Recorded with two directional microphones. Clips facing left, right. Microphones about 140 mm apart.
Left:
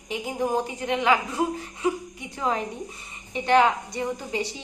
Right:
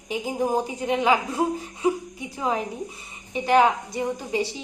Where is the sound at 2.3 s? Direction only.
10° right (ahead or behind).